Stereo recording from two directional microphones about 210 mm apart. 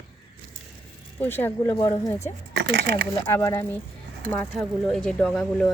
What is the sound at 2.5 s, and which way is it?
Speech, 50° right (ahead or behind).